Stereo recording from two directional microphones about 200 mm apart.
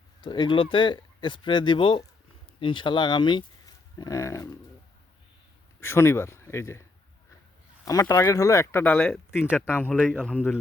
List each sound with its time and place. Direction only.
0.2 s speech: 20° left (ahead or behind)
5.8 s speech: 10° left (ahead or behind)
7.9 s speech: 15° left (ahead or behind)